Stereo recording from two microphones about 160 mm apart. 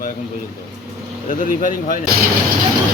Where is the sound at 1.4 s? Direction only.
55° left (ahead or behind).